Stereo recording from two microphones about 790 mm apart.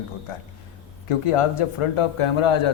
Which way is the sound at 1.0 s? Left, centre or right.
Left.